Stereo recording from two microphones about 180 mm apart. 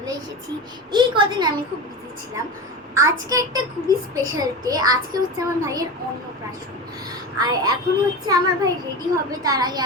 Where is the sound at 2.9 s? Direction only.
20° right (ahead or behind).